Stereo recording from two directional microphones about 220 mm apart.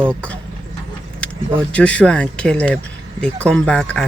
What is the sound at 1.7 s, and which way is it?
Speech, 5° left (ahead or behind).